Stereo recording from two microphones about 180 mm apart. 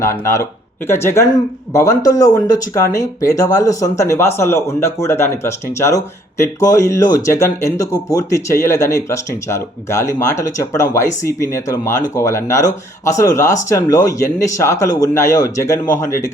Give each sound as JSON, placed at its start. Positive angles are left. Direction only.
{"t": 0.0, "sound": "speech", "side_deg": 15}